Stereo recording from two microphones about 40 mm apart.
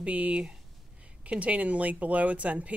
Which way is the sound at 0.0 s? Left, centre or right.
Right.